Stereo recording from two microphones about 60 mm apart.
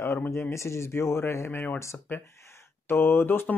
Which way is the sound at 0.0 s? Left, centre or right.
Left.